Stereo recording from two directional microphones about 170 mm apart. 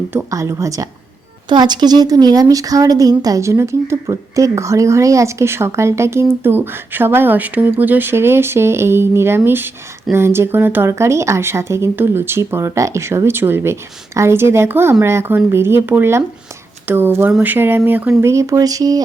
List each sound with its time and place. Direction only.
0.1 s speech: 15° right (ahead or behind)